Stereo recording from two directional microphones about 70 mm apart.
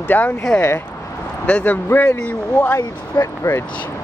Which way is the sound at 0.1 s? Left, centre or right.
Left.